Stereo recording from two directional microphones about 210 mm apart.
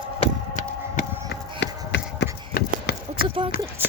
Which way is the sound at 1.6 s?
55° left (ahead or behind).